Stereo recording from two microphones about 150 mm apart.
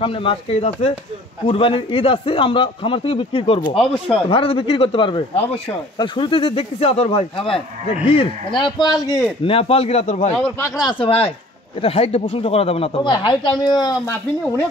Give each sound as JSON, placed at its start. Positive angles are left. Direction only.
{"t": 0.0, "sound": "a man's voice", "side_deg": 35}
{"t": 10.8, "sound": "a man's voice", "side_deg": 30}